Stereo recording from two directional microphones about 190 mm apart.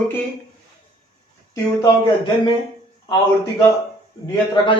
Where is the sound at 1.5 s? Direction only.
20° left (ahead or behind).